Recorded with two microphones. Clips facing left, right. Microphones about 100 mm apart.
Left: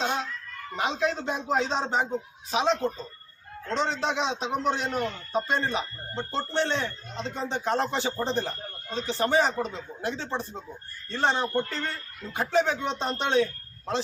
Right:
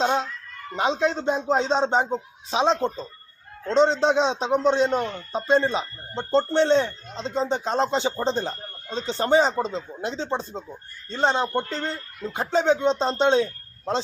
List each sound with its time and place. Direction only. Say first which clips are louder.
0.0 s a man's voice: right 6 dB; 35° right (ahead or behind)